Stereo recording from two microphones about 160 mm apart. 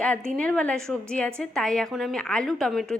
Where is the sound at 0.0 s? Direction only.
10° left (ahead or behind).